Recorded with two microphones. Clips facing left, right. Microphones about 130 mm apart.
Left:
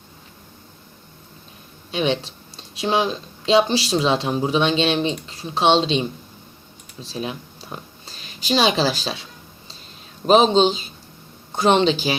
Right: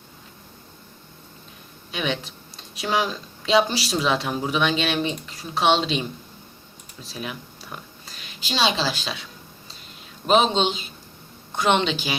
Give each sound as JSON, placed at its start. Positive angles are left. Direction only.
{"t": 1.9, "sound": "speech", "side_deg": 30}
{"t": 7.0, "sound": "a sound", "side_deg": 30}
{"t": 8.4, "sound": "a woman's voice", "side_deg": 45}
{"t": 10.2, "sound": "a man's voice", "side_deg": 35}